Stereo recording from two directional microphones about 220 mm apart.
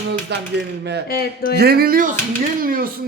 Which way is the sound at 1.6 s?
45° right (ahead or behind).